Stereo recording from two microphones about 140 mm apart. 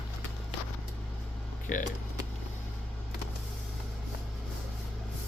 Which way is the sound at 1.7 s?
70° left (ahead or behind).